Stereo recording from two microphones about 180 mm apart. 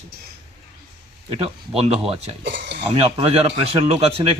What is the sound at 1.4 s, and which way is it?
Speech, 30° right (ahead or behind).